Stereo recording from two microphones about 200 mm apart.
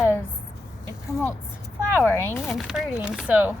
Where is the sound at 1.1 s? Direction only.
15° left (ahead or behind).